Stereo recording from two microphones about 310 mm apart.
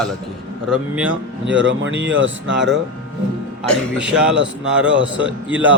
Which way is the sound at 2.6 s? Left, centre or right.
Centre.